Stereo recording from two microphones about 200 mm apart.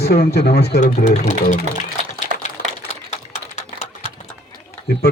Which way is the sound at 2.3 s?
45° right (ahead or behind).